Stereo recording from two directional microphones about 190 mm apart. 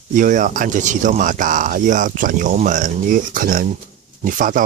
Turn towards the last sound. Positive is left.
turn(degrees=-45)  # may be behind; listen again after turning